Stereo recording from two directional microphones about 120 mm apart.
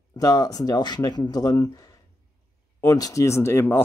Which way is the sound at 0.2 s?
30° left (ahead or behind).